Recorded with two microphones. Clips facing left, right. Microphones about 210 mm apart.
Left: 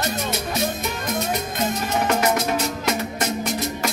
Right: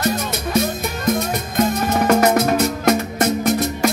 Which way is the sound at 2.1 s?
50° right (ahead or behind).